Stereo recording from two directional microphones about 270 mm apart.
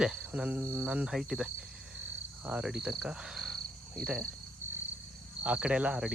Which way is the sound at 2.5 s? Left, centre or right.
Centre.